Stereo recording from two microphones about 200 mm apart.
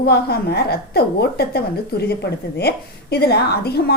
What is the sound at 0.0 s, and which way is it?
A woman's voice, 50° left (ahead or behind).